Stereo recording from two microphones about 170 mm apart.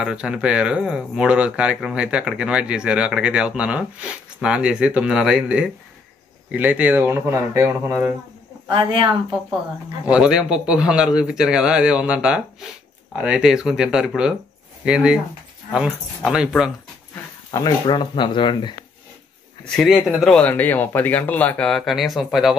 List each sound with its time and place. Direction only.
0.0 s speech: 5° right (ahead or behind)
8.6 s speech: 30° right (ahead or behind)
10.0 s speech: 5° right (ahead or behind)
16.2 s speech: centre (ahead or behind)
17.5 s speech: 25° left (ahead or behind)
19.6 s speech: centre (ahead or behind)